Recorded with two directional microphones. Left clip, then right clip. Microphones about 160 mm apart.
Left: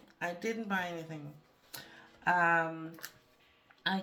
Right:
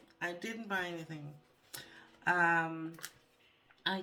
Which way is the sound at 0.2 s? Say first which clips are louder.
Left 4 dB; 35° left (ahead or behind).